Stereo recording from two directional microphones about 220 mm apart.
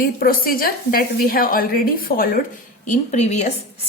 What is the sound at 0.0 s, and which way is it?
A woman's voice, 40° left (ahead or behind).